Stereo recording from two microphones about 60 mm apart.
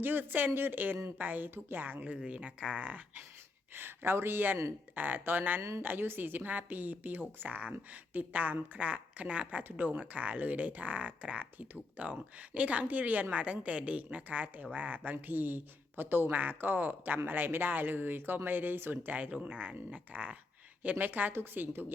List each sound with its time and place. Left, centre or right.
0.0 s speech: right
3.8 s speech: right
19.1 s speech: right